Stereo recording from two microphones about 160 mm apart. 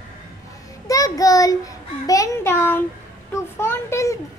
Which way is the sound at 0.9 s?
20° left (ahead or behind).